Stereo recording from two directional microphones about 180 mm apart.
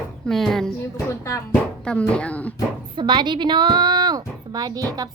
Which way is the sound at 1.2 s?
15° left (ahead or behind).